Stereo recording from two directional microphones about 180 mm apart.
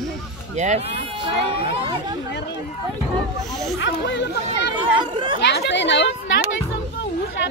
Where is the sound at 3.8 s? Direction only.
80° left.